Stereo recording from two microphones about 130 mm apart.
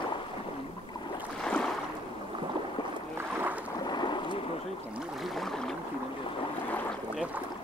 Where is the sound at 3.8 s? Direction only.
35° left (ahead or behind).